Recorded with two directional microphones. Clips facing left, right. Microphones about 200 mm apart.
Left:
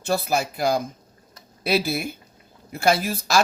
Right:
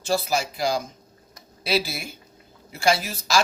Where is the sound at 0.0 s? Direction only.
60° left (ahead or behind).